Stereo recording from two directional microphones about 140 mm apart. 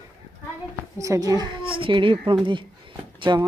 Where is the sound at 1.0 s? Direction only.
25° right (ahead or behind).